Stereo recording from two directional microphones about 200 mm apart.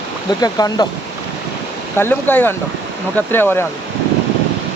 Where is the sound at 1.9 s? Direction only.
10° left (ahead or behind).